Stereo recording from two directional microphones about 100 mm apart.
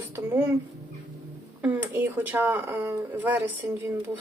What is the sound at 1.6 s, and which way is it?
Speech, 15° right (ahead or behind).